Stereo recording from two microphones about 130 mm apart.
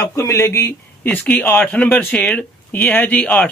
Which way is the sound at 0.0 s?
20° left (ahead or behind).